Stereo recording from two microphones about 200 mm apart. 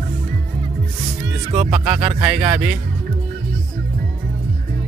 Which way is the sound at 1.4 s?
30° right (ahead or behind).